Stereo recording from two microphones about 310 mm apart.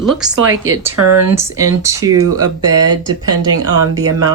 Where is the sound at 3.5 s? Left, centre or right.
Right.